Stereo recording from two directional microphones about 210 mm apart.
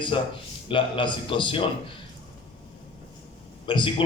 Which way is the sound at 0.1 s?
25° left (ahead or behind).